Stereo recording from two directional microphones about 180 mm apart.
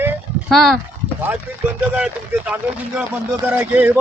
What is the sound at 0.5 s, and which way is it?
Speech, centre (ahead or behind).